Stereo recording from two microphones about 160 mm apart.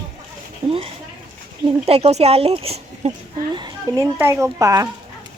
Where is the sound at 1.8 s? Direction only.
40° right (ahead or behind).